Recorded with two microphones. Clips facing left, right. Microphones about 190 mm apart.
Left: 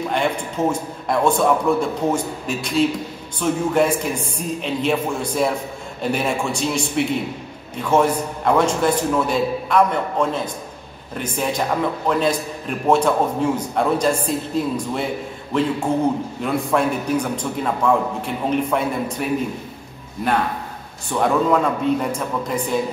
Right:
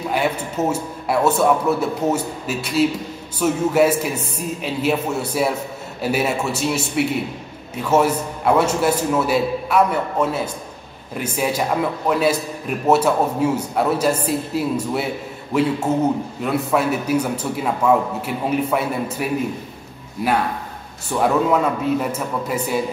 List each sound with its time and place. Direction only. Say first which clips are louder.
0.1 s a man's voice: right 3 dB; 5° right (ahead or behind)
7.9 s a man's voice: even; 5° right (ahead or behind)